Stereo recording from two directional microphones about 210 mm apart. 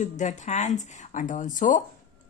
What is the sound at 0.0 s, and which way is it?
Speech, 35° left (ahead or behind).